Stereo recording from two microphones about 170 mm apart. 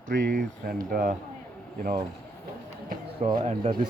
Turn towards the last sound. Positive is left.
turn(degrees=-30)  # may be behind; listen again after turning